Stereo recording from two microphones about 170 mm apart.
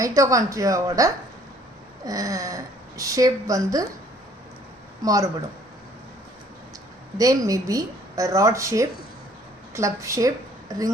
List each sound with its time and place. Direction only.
0.0 s a woman's voice: 20° right (ahead or behind)
5.0 s a woman's voice: 20° right (ahead or behind)
7.2 s a woman's voice: 20° right (ahead or behind)